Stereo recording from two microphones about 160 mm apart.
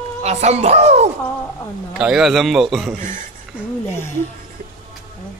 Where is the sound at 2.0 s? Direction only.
5° right (ahead or behind).